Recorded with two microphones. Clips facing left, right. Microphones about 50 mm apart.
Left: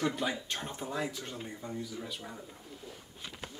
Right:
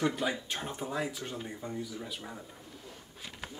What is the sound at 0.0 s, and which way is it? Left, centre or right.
Speech, centre.